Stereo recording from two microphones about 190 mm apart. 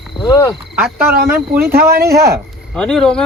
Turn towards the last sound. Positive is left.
turn(degrees=5)  # may be behind; listen again after turning